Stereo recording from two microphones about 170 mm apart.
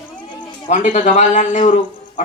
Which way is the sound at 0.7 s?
45° left (ahead or behind).